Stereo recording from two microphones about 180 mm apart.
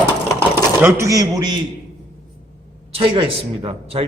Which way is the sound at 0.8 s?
15° right (ahead or behind).